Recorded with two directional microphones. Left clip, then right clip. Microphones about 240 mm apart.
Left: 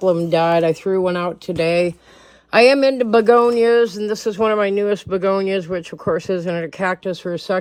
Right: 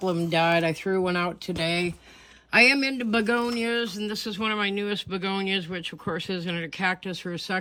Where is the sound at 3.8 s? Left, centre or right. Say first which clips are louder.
Left 12 dB; centre.